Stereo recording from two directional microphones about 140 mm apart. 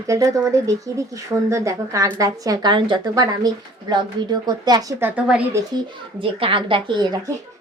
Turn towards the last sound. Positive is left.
turn(degrees=-30)  # may be behind; listen again after turning